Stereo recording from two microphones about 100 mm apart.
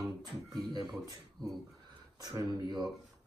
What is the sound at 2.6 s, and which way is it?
Speech, 45° right (ahead or behind).